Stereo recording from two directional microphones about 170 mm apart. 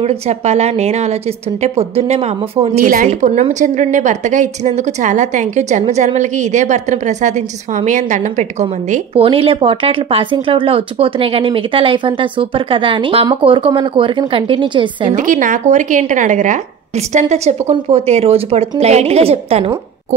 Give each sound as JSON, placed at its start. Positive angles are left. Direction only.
{"t": 0.0, "sound": "speech", "side_deg": -40}
{"t": 2.8, "sound": "a woman's voice", "side_deg": -55}
{"t": 3.1, "sound": "speech", "side_deg": -45}
{"t": 15.1, "sound": "a woman's voice", "side_deg": -50}